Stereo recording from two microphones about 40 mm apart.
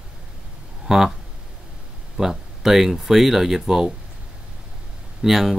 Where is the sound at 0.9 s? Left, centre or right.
Centre.